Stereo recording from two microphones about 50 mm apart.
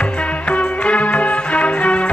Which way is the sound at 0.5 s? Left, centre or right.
Left.